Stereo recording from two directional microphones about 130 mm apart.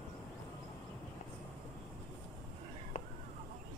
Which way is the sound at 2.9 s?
65° left (ahead or behind).